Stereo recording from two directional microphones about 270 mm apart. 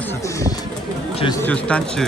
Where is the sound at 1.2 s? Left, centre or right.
Centre.